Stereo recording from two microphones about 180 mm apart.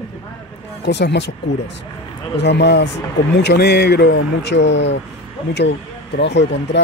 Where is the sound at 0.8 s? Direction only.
70° left (ahead or behind).